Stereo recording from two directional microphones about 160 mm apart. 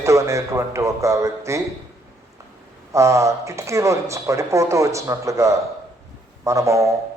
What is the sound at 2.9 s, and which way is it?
A man's voice, 20° right (ahead or behind).